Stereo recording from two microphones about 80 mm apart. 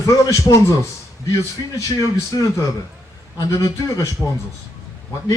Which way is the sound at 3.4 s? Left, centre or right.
Left.